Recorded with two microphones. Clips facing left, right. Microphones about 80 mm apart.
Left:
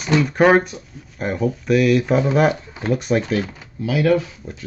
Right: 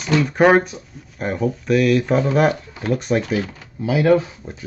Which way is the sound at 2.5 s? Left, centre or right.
Centre.